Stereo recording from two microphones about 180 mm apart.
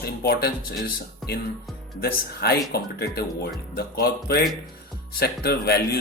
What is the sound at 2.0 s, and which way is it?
Speech, 60° left (ahead or behind).